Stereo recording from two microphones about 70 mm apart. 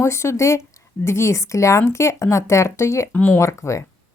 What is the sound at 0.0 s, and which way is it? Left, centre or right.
Speech, left.